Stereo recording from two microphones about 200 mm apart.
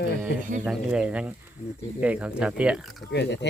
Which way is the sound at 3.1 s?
60° left (ahead or behind).